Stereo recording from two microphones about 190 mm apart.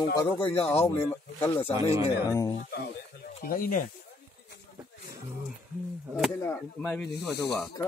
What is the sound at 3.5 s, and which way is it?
Speech, 45° left (ahead or behind).